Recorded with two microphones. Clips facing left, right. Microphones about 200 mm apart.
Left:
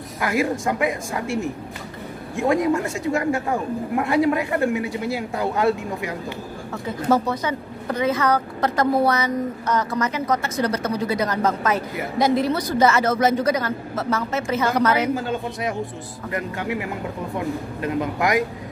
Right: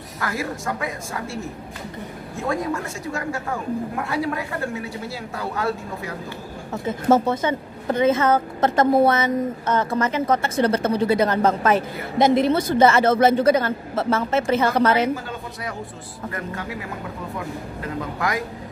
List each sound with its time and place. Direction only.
0.2 s a man's voice: 15° left (ahead or behind)
6.7 s a woman's voice: 25° right (ahead or behind)
16.3 s a man's voice: 20° left (ahead or behind)
17.8 s speech: 20° left (ahead or behind)